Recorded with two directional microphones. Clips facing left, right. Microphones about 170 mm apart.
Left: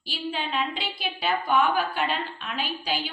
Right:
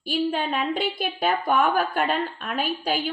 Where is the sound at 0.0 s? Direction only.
50° right (ahead or behind).